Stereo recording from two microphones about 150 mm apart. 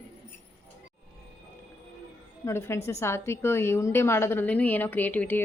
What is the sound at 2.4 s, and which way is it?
A woman's voice, 15° left (ahead or behind).